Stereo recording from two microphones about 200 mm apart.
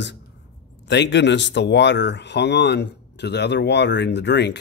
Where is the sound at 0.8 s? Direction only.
60° left (ahead or behind).